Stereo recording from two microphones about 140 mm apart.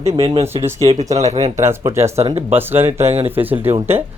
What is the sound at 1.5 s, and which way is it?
Speech, 20° right (ahead or behind).